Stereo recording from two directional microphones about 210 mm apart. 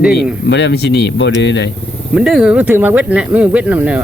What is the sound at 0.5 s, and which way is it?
A man's voice, 55° left (ahead or behind).